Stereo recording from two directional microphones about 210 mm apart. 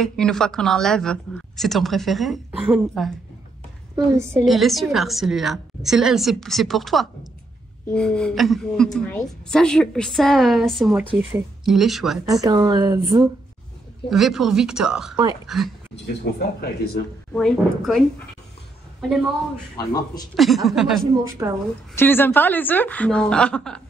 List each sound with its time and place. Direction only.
0.0 s a woman's voice: centre (ahead or behind)
3.9 s a woman's voice: 15° right (ahead or behind)
4.5 s a woman's voice: centre (ahead or behind)
12.3 s speech: 15° right (ahead or behind)
14.1 s a woman's voice: centre (ahead or behind)
16.3 s speech: 50° left (ahead or behind)
17.3 s a woman's voice: 5° left (ahead or behind)
19.8 s a woman's voice: 20° left (ahead or behind)
20.3 s a woman's voice: centre (ahead or behind)
21.4 s a woman's voice: 15° right (ahead or behind)
21.9 s a woman's voice: 10° left (ahead or behind)